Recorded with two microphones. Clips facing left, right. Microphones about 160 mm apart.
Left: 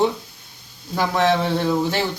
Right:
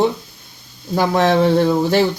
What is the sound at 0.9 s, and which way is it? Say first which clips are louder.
Speech: right 4 dB; 35° right (ahead or behind).